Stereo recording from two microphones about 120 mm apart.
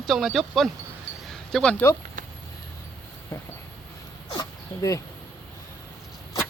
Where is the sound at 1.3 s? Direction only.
5° left (ahead or behind).